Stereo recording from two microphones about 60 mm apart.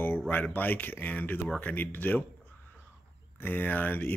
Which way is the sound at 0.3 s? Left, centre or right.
Left.